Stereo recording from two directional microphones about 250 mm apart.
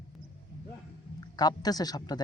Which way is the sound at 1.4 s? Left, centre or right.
Centre.